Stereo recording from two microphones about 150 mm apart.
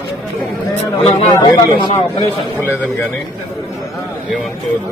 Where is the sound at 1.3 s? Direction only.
30° left (ahead or behind).